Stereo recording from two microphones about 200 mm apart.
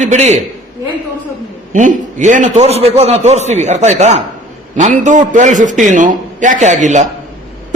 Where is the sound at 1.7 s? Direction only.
40° right (ahead or behind).